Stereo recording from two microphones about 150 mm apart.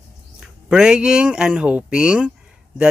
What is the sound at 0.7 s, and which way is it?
Speech, 5° right (ahead or behind).